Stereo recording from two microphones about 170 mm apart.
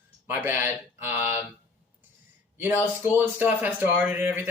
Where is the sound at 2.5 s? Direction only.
10° right (ahead or behind).